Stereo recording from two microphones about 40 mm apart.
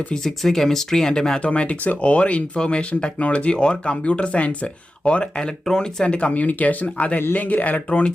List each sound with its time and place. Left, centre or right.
0.1 s speech: centre
1.4 s speech: left
5.4 s speech: centre
6.3 s speech: left
7.9 s speech: left